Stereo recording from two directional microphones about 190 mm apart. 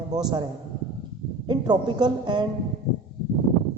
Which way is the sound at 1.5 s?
25° right (ahead or behind).